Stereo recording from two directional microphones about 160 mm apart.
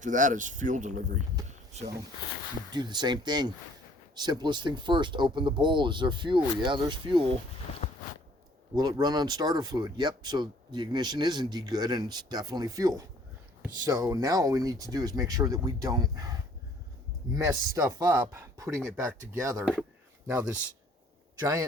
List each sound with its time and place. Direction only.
0.0 s speech: 50° right (ahead or behind)
1.5 s a sound: 45° right (ahead or behind)
2.7 s speech: 25° right (ahead or behind)
8.7 s speech: 25° right (ahead or behind)